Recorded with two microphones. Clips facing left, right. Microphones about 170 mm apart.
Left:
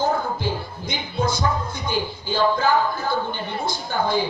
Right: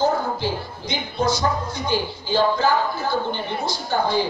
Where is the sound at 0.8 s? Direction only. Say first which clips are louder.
Right 2 dB; 50° left (ahead or behind).